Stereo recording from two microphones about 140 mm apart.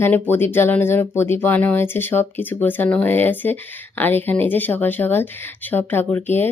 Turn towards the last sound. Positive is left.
turn(degrees=15)  # may be behind; listen again after turning